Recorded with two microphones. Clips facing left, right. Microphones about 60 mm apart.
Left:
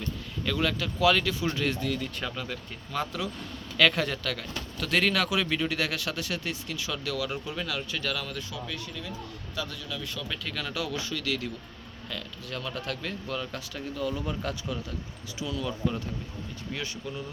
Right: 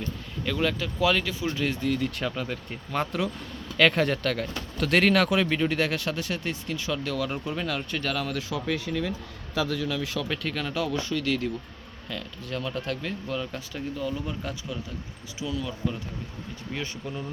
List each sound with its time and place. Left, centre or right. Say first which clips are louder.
0.4 s speech: right 2 dB; centre
1.7 s speech: right 4 dB; right
2.6 s speech: right 3 dB; right
5.5 s speech: right 4 dB; right
7.3 s speech: right 3 dB; centre
7.9 s speech: right 4 dB; right
8.3 s speech: right 7 dB; right
10.2 s speech: right 5 dB; right
10.5 s speech: right 3 dB; right
13.0 s speech: right 2 dB; centre
14.1 s speech: even; centre